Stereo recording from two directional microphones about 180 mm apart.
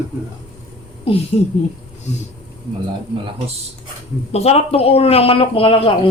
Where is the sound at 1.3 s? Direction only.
25° left (ahead or behind).